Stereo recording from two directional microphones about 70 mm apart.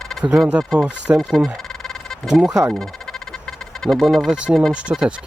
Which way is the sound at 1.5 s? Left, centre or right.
Centre.